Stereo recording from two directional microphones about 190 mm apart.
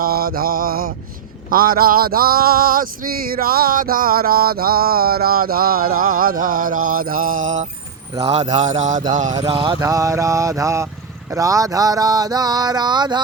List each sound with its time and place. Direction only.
0.0 s mantra: 50° right (ahead or behind)
9.3 s mantra: 25° right (ahead or behind)
9.8 s mantra: 15° right (ahead or behind)